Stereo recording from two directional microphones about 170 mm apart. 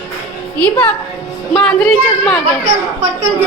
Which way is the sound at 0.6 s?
5° left (ahead or behind).